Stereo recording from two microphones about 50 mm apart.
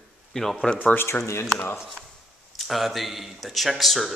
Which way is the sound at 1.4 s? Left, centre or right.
Left.